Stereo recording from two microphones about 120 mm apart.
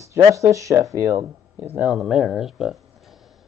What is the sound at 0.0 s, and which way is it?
Speech, 25° right (ahead or behind).